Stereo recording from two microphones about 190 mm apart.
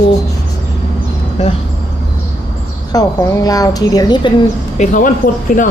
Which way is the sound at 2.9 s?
15° left (ahead or behind).